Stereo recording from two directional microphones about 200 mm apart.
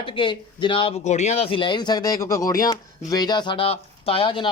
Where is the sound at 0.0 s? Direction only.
25° left (ahead or behind).